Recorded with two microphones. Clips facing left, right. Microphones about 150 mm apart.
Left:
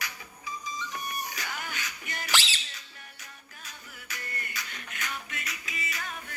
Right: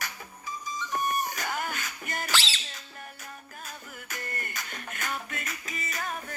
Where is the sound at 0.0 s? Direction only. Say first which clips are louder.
Right 1 dB; 45° right (ahead or behind).